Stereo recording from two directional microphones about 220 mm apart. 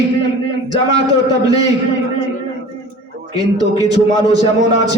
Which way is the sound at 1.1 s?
15° right (ahead or behind).